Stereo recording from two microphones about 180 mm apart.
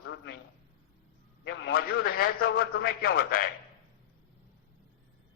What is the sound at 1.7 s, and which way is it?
A man's voice, 55° left (ahead or behind).